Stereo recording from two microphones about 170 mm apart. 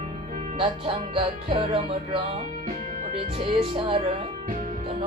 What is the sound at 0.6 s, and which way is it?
Music, 30° right (ahead or behind).